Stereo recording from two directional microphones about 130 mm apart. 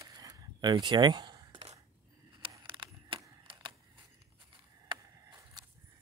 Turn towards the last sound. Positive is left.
turn(degrees=-30)  # may be behind; listen again after turning